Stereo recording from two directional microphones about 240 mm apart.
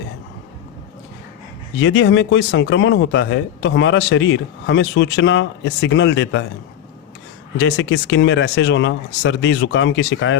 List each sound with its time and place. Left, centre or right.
1.8 s speech: left
7.6 s speech: left